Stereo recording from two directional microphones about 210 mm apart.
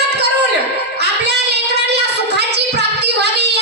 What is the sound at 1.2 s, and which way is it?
Child singing, 50° right (ahead or behind).